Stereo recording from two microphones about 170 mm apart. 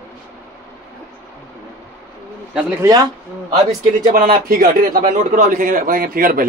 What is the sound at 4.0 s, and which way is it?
A man's voice, 55° right (ahead or behind).